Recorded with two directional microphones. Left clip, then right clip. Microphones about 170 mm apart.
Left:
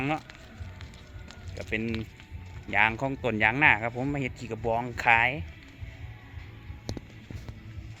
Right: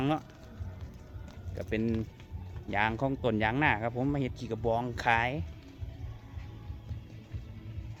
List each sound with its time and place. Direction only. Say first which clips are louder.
0.0 s speech: left 1 dB; 15° right (ahead or behind)
1.7 s speech: left 1 dB; 20° right (ahead or behind)
2.6 s speech: left 5 dB; 10° right (ahead or behind)